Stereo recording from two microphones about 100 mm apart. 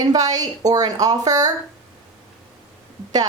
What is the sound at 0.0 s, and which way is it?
A woman's voice, 40° right (ahead or behind).